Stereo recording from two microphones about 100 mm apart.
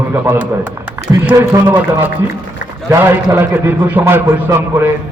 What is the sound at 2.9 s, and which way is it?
A man's voice, 25° right (ahead or behind).